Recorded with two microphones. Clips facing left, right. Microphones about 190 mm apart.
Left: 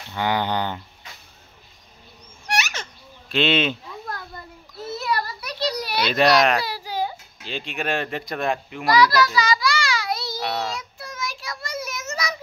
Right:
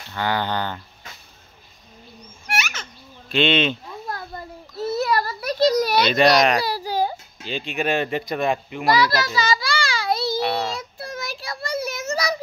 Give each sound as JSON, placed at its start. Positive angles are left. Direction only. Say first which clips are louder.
{"t": 0.1, "sound": "speech", "louder": "left 1 dB", "side_deg": 15}
{"t": 3.3, "sound": "speech", "louder": "right 1 dB", "side_deg": 5}
{"t": 4.9, "sound": "a sound", "louder": "right 3 dB", "side_deg": -45}
{"t": 6.0, "sound": "speech", "louder": "left 2 dB", "side_deg": 0}
{"t": 6.6, "sound": "a sound", "louder": "right 4 dB", "side_deg": -35}
{"t": 7.4, "sound": "speech", "louder": "right 3 dB", "side_deg": 0}
{"t": 8.9, "sound": "a sound", "louder": "left 4 dB", "side_deg": -25}
{"t": 10.4, "sound": "child singing", "louder": "right 3 dB", "side_deg": 0}
{"t": 10.8, "sound": "child singing", "louder": "right 2 dB", "side_deg": -35}